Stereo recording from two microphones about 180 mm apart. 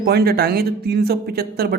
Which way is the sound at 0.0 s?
60° right (ahead or behind).